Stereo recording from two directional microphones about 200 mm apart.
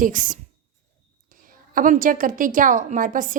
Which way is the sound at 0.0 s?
40° right (ahead or behind).